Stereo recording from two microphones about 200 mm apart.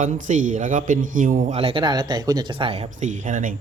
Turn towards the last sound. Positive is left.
turn(degrees=-40)  # may be behind; listen again after turning